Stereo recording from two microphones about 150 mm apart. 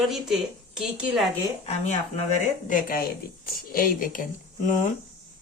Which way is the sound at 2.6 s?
65° left (ahead or behind).